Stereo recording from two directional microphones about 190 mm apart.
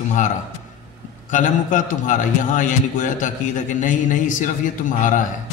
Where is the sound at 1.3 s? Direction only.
45° left (ahead or behind).